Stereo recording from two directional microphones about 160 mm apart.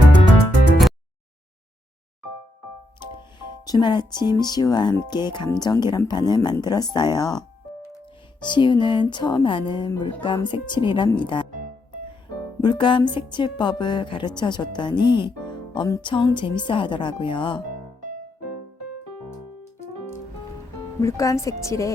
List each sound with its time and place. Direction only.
3.7 s a woman's voice: 30° left (ahead or behind)
11.5 s music: 55° right (ahead or behind)
12.6 s a woman's voice: 30° left (ahead or behind)
21.0 s a woman's voice: 20° left (ahead or behind)